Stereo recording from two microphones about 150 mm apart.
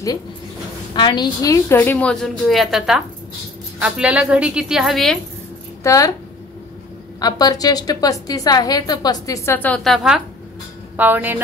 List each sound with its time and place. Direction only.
0.9 s a woman's voice: 30° left (ahead or behind); by 5.2 s centre (ahead or behind)
5.9 s a woman's voice: 20° left (ahead or behind)
7.2 s a woman's voice: 25° left (ahead or behind)
9.6 s a woman's voice: 5° left (ahead or behind)
11.0 s speech: 10° right (ahead or behind)